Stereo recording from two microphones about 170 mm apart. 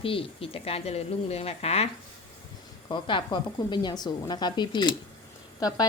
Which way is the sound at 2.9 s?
30° left (ahead or behind).